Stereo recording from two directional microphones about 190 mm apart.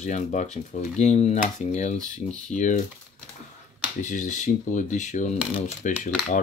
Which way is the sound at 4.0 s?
40° left (ahead or behind).